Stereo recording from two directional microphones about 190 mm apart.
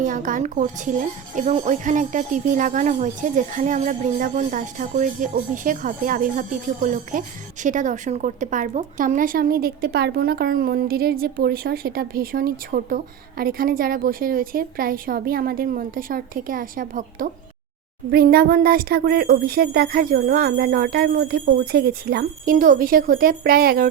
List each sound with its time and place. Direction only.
0.0 s speech: 45° right (ahead or behind)
18.1 s speech: 55° right (ahead or behind)